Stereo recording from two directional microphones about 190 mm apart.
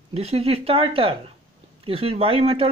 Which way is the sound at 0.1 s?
30° right (ahead or behind).